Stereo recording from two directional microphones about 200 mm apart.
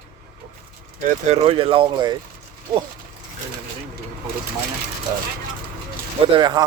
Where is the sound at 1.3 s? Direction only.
30° right (ahead or behind).